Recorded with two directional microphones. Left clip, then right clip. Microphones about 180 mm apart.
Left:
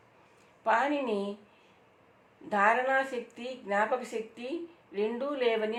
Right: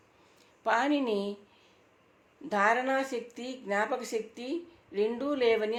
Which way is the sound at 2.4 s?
50° right (ahead or behind).